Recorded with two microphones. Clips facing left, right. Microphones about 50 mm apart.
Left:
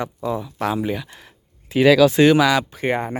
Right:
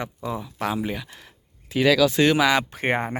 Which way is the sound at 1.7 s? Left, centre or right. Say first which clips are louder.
Left 5 dB; left.